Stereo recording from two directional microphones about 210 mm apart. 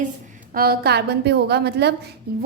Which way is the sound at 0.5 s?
45° right (ahead or behind).